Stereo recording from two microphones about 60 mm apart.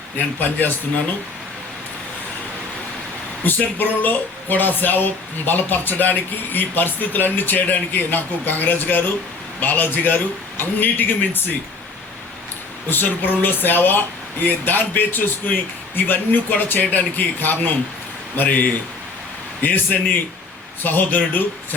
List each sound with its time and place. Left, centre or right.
0.3 s speech: left
3.4 s speech: left
12.9 s a man's voice: left